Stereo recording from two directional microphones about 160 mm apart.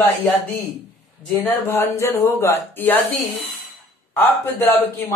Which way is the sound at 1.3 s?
15° left (ahead or behind).